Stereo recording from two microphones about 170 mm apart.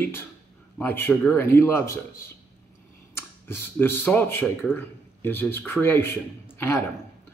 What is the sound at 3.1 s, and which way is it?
Speech, 15° left (ahead or behind).